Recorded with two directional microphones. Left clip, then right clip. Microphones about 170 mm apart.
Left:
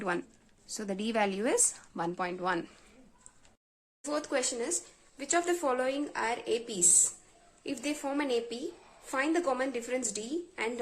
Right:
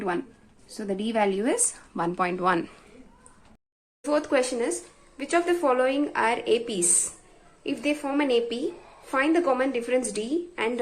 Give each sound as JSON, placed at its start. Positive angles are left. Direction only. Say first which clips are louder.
{"t": 0.7, "sound": "a woman's voice", "louder": "right 5 dB", "side_deg": 30}
{"t": 2.0, "sound": "speech", "louder": "right 8 dB", "side_deg": 5}
{"t": 4.1, "sound": "speech", "louder": "right 8 dB", "side_deg": 5}
{"t": 7.6, "sound": "speech", "louder": "right 7 dB", "side_deg": 15}